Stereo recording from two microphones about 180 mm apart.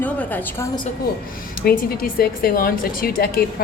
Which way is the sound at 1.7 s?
55° left (ahead or behind).